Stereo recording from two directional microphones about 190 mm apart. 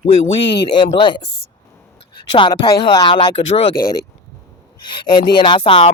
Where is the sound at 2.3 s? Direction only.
25° left (ahead or behind).